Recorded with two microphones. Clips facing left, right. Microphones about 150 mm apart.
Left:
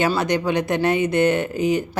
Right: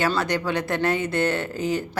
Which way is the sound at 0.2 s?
20° left (ahead or behind).